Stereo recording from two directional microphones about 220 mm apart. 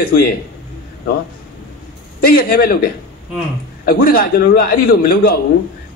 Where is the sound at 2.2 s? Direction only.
40° left (ahead or behind).